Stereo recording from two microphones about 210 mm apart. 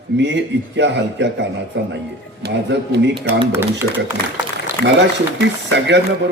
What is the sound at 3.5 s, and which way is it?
Speech, 10° right (ahead or behind).